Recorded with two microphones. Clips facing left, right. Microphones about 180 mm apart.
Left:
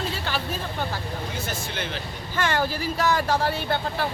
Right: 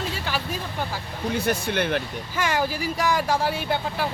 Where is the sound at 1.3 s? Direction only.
60° right (ahead or behind).